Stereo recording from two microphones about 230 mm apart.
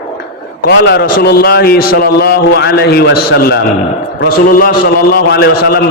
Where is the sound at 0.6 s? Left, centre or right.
Left.